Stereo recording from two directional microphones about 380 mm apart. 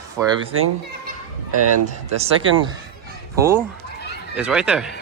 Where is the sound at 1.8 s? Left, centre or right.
Centre.